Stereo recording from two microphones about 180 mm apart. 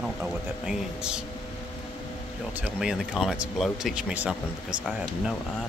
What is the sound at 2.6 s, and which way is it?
Speech, 5° right (ahead or behind).